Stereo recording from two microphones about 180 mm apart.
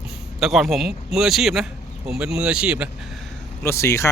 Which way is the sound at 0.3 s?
Centre (ahead or behind).